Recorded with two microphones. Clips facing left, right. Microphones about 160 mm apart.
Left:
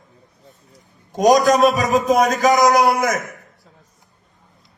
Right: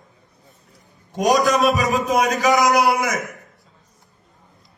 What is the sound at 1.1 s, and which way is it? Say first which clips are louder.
A man's voice: left 4 dB; 40° left (ahead or behind).